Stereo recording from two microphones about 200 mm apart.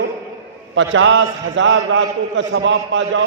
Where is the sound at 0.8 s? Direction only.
70° right (ahead or behind).